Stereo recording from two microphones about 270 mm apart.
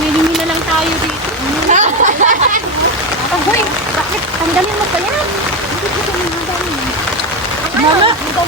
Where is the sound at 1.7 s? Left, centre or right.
Right.